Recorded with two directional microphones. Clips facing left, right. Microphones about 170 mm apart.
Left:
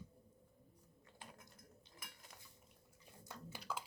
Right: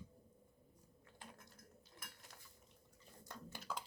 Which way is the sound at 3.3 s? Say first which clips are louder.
Left 1 dB; 5° left (ahead or behind).